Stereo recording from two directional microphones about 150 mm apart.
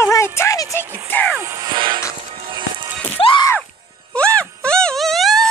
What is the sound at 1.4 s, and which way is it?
Music, 25° right (ahead or behind).